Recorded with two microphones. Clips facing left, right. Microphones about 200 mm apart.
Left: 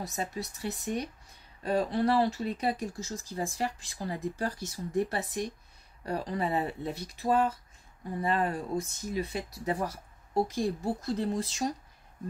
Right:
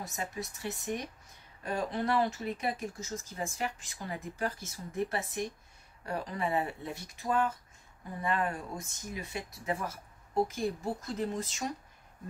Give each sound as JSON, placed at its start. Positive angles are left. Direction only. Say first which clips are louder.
{"t": 0.0, "sound": "speech", "louder": "left 3 dB", "side_deg": 35}